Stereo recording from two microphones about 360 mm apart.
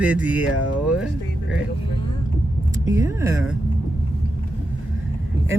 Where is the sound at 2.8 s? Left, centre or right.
Centre.